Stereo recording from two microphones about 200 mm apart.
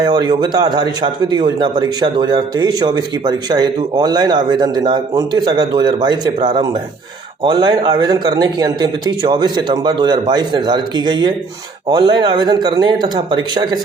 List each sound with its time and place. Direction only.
0.0 s a man's voice: 20° right (ahead or behind)